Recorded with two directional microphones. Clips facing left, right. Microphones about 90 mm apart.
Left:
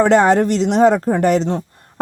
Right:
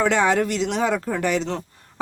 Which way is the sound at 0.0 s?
40° left (ahead or behind).